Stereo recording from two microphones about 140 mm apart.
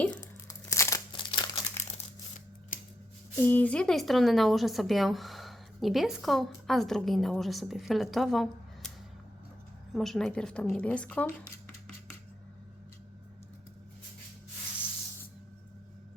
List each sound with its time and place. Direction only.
0.6 s crumpling: 20° left (ahead or behind)
1.1 s crumpling: 35° left (ahead or behind)
2.7 s scissors: 70° left (ahead or behind)
3.3 s a woman's voice: 15° left (ahead or behind)
9.9 s a woman's voice: centre (ahead or behind)